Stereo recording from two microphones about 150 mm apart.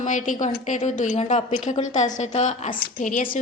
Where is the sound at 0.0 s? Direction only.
55° left (ahead or behind).